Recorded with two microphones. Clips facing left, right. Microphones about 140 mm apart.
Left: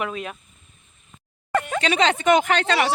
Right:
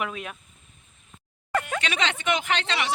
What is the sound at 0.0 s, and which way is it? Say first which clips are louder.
Speech: left 3 dB; centre (ahead or behind).